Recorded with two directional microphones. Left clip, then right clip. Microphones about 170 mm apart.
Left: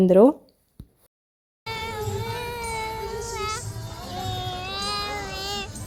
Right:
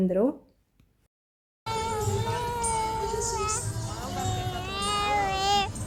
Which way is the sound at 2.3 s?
35° left (ahead or behind).